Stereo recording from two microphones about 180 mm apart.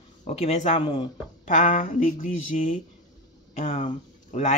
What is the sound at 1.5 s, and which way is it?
Speech, 45° left (ahead or behind).